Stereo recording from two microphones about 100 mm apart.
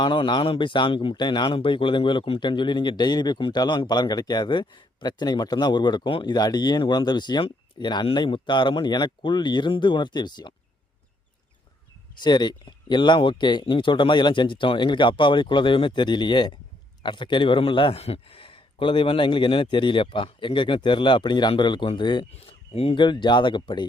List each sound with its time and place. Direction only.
0.0 s speech: 50° left (ahead or behind)
6.2 s speech: 45° left (ahead or behind)
12.2 s a man's voice: 45° left (ahead or behind)
22.3 s speech: 90° left
23.0 s speech: 50° left (ahead or behind)